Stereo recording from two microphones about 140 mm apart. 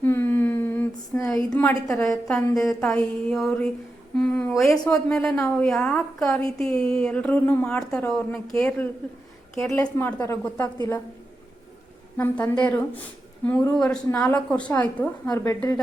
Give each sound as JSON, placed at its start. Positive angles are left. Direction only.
{"t": 0.0, "sound": "a sound", "side_deg": 15}
{"t": 1.5, "sound": "a woman's voice", "side_deg": 10}
{"t": 10.6, "sound": "a woman's voice", "side_deg": 25}
{"t": 12.1, "sound": "a woman's voice", "side_deg": 15}